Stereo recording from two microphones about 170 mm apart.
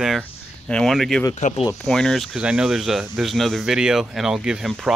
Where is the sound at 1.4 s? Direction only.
45° left (ahead or behind).